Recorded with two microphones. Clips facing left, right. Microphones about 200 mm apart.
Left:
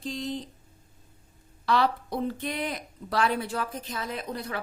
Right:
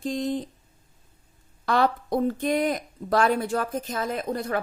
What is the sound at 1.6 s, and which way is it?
A woman's voice, 50° right (ahead or behind).